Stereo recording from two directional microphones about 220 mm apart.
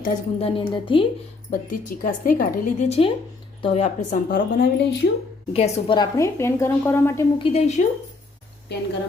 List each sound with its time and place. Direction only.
0.0 s a woman's voice: 30° left (ahead or behind)
1.5 s speech: 35° left (ahead or behind)
5.5 s a woman's voice: 25° left (ahead or behind)
7.4 s a woman's voice: 30° left (ahead or behind)
8.7 s speech: 50° left (ahead or behind)